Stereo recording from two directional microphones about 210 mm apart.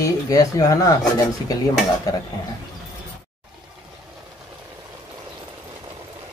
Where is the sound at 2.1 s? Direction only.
15° left (ahead or behind).